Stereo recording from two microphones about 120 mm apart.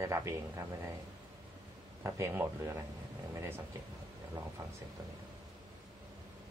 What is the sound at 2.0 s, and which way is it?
Speech, 20° right (ahead or behind).